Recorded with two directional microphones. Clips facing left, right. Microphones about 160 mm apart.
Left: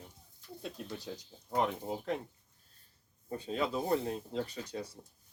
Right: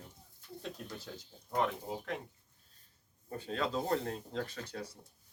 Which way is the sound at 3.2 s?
20° left (ahead or behind).